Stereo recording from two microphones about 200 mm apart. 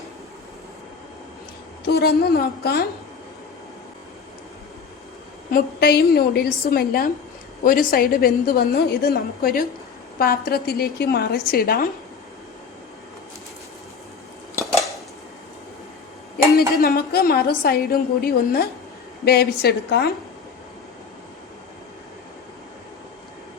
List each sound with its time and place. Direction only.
1.9 s a woman's voice: 50° left (ahead or behind)
5.5 s a woman's voice: 45° left (ahead or behind)
16.6 s a woman's voice: 50° left (ahead or behind)